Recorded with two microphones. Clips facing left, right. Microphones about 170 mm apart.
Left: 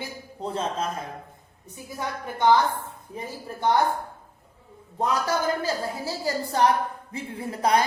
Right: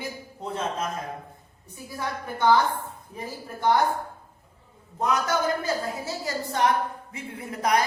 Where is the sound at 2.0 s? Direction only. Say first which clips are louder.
Left 1 dB; 20° left (ahead or behind).